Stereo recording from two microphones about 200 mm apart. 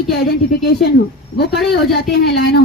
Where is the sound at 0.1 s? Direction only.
55° left (ahead or behind).